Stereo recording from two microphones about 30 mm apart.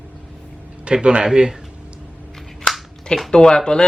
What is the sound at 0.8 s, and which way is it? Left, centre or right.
Speech, right.